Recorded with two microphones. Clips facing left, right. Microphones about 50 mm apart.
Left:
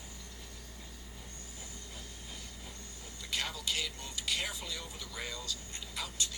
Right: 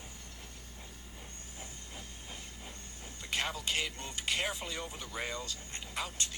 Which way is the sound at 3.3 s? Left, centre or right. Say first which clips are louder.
Right 2 dB; right.